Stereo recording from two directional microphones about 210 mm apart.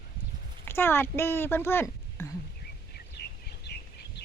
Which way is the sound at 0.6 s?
10° left (ahead or behind).